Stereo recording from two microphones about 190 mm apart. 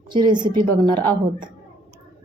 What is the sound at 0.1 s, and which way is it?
Speech, 25° right (ahead or behind).